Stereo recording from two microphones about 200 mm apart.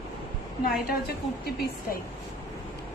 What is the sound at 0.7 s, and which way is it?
A woman's voice, 50° left (ahead or behind).